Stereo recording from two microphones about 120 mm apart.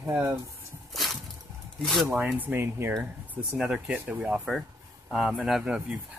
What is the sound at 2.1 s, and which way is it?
Speech, 15° right (ahead or behind).